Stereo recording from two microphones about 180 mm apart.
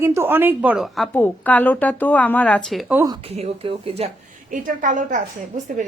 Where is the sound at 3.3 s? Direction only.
35° right (ahead or behind).